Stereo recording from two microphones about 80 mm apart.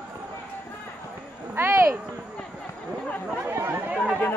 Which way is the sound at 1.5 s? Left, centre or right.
Right.